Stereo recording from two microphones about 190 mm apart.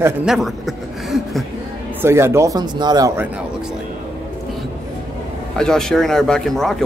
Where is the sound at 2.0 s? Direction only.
15° right (ahead or behind).